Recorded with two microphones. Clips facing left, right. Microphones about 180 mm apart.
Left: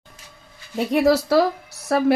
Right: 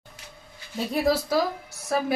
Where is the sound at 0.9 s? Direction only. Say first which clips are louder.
Left 6 dB; 75° left (ahead or behind).